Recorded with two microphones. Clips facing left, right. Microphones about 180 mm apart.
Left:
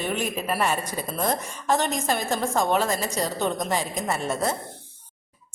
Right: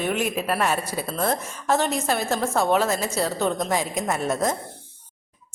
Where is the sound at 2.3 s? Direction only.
15° left (ahead or behind).